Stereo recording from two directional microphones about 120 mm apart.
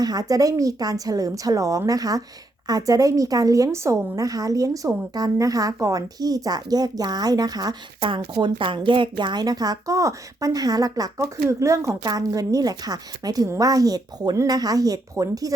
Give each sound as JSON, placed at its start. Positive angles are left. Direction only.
{"t": 0.0, "sound": "a woman's voice", "side_deg": -30}